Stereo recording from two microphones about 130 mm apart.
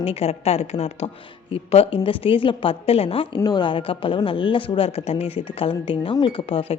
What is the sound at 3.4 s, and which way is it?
Speech, 35° left (ahead or behind).